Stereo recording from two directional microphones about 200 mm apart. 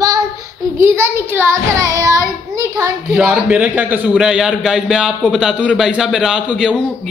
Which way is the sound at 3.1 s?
Centre (ahead or behind).